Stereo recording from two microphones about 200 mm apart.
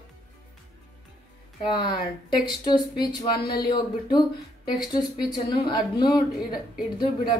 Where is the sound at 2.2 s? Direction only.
20° left (ahead or behind).